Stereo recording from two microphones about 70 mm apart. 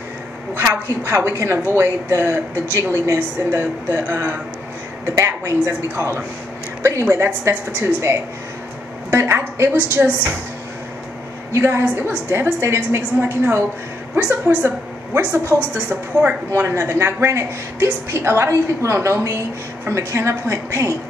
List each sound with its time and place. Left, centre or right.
0.6 s a woman's voice: right
5.7 s a woman's voice: right
7.1 s a woman's voice: right
7.4 s speech: right
11.5 s a woman's voice: right
15.7 s a woman's voice: right
16.5 s speech: right